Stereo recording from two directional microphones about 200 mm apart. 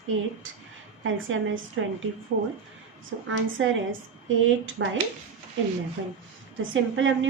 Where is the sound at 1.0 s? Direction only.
75° right (ahead or behind).